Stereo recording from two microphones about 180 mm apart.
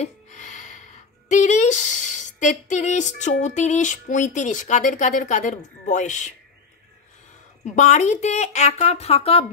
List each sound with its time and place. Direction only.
0.0 s a sound: 40° left (ahead or behind)
1.3 s speech: 40° left (ahead or behind)
7.6 s a woman's voice: 40° left (ahead or behind)